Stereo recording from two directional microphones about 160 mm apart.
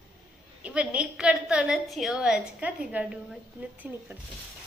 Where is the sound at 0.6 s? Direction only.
5° right (ahead or behind).